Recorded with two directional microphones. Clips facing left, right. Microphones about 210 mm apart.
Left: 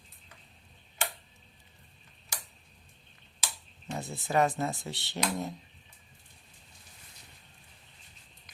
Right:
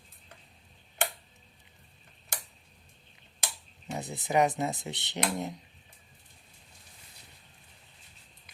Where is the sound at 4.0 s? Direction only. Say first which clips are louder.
Right 1 dB; 20° right (ahead or behind).